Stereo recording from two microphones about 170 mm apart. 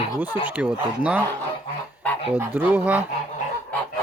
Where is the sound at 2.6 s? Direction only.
10° right (ahead or behind).